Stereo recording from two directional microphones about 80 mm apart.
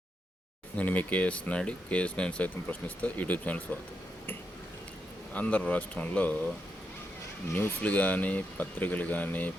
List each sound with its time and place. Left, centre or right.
0.8 s speech: centre
5.3 s speech: centre
7.5 s speech: centre